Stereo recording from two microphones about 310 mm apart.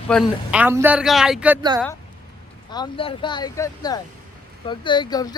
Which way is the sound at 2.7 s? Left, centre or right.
Centre.